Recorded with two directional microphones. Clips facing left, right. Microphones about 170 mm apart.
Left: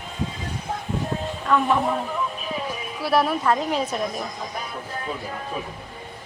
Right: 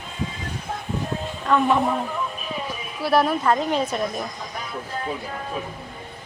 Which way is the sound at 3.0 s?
Centre (ahead or behind).